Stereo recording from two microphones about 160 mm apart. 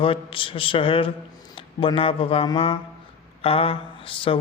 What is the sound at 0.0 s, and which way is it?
A man's voice, 35° left (ahead or behind).